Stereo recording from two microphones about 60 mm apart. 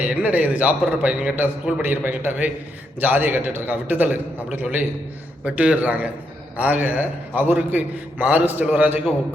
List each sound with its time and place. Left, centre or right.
0.0 s a man's voice: right
1.8 s a man's voice: right
5.5 s a man's voice: right